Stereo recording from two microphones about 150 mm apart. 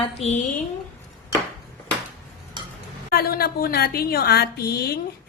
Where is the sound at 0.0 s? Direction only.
45° left (ahead or behind).